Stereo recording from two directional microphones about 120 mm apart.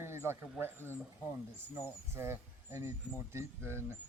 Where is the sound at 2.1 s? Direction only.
20° right (ahead or behind).